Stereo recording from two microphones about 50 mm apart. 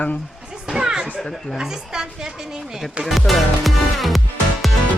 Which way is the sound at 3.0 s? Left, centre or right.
Centre.